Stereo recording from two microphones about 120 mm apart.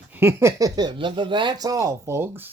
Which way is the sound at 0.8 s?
40° right (ahead or behind).